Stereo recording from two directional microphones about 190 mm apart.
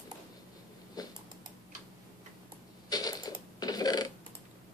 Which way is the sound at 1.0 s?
20° left (ahead or behind).